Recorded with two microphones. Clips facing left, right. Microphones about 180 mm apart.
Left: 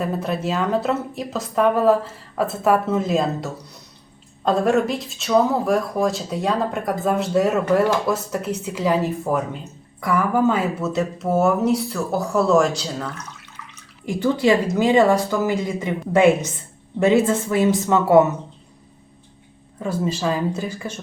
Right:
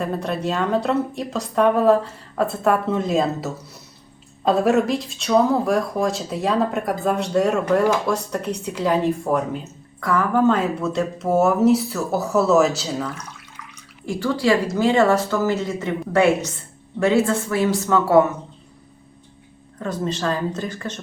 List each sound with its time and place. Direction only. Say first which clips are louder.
0.0 s speech: even; centre (ahead or behind)
10.0 s speech: even; 15° left (ahead or behind); by 13.2 s 5° right (ahead or behind)
14.0 s speech: left 2 dB; 20° left (ahead or behind)
19.8 s speech: left 1 dB; 10° left (ahead or behind)